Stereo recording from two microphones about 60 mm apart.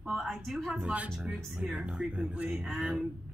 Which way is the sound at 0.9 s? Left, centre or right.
Right.